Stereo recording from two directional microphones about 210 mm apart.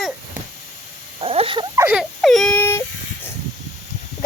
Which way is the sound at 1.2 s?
25° right (ahead or behind).